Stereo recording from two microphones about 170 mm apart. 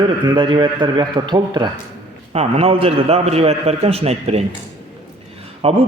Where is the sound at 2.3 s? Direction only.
35° right (ahead or behind).